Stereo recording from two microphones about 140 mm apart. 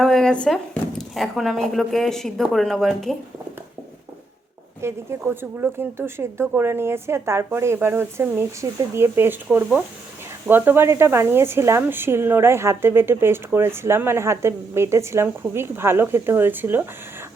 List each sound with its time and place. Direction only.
0.0 s speech: 5° left (ahead or behind)
4.8 s speech: 20° right (ahead or behind)